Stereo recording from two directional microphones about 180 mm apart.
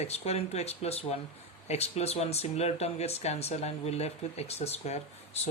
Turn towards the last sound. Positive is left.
turn(degrees=35)  # may be behind; listen again after turning